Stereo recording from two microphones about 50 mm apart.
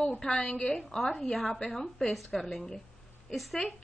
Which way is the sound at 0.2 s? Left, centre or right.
Centre.